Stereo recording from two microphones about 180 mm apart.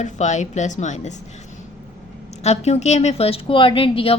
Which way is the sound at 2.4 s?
35° left (ahead or behind).